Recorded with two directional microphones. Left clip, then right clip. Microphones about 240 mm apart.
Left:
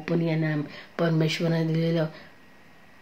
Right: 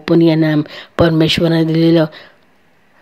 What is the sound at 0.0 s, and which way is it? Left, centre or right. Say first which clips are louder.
Speech: right 16 dB; right.